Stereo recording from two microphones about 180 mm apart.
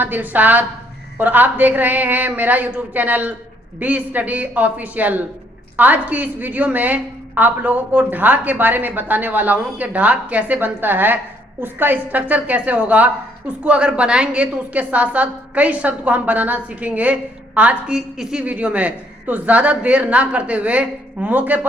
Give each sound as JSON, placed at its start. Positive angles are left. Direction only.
{"t": 0.0, "sound": "a woman's voice", "side_deg": -10}